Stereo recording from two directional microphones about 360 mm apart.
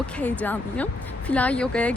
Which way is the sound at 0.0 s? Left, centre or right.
Centre.